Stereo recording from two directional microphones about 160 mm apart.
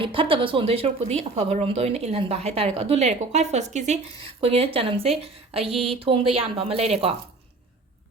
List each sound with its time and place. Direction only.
0.0 s a woman's voice: 35° right (ahead or behind)